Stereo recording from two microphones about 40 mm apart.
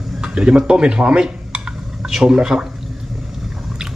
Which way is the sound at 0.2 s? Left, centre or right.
Right.